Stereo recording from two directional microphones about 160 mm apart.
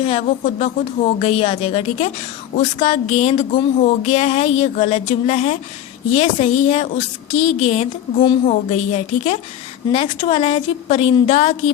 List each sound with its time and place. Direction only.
0.0 s a woman's voice: 40° left (ahead or behind)